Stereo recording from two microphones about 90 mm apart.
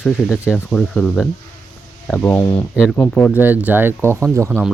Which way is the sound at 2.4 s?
40° left (ahead or behind).